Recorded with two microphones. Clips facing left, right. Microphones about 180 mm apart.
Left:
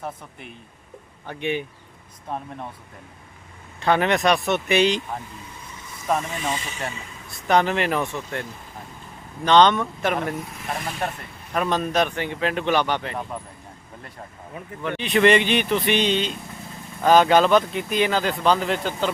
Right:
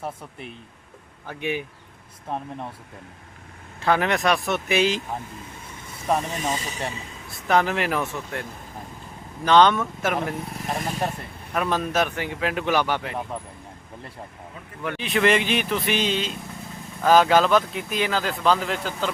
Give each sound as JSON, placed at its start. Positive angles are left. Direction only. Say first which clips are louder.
{"t": 0.0, "sound": "speech", "louder": "right 1 dB", "side_deg": 0}
{"t": 3.8, "sound": "speech", "louder": "left 2 dB", "side_deg": 0}
{"t": 6.3, "sound": "speech", "louder": "right 1 dB", "side_deg": -40}
{"t": 7.3, "sound": "speech", "louder": "left 1 dB", "side_deg": 0}
{"t": 11.5, "sound": "speech", "louder": "left 1 dB", "side_deg": -5}
{"t": 14.8, "sound": "speech", "louder": "left 3 dB", "side_deg": -5}